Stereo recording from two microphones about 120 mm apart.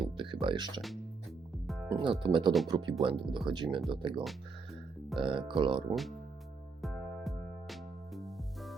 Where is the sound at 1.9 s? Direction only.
45° right (ahead or behind).